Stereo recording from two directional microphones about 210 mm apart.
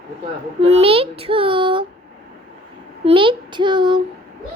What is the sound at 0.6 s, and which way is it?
Speech, 30° right (ahead or behind).